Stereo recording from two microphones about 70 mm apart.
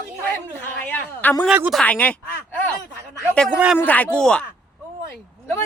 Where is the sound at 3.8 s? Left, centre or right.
Left.